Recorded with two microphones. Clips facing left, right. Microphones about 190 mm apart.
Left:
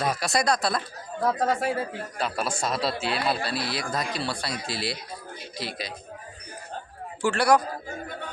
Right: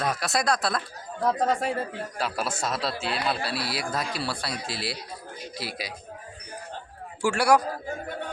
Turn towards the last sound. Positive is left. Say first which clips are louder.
# even
turn(degrees=-10)  # may be behind; listen again after turning